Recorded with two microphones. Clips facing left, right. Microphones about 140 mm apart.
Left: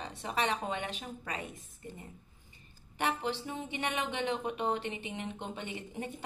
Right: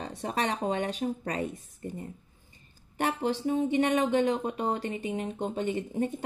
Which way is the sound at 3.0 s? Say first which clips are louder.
Right 5 dB; 40° right (ahead or behind).